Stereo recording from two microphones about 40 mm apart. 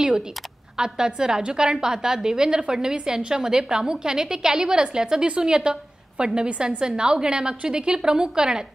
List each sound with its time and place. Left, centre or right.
0.7 s a woman's voice: centre